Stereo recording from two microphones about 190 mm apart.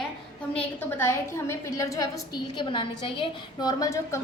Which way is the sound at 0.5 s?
10° left (ahead or behind).